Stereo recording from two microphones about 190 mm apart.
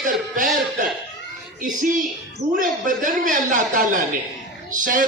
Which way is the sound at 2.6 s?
45° right (ahead or behind).